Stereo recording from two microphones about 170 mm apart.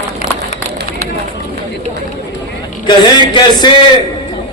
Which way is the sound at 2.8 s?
25° left (ahead or behind).